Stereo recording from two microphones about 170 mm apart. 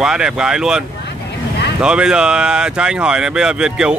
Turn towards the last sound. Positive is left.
turn(degrees=-5)  # may be behind; listen again after turning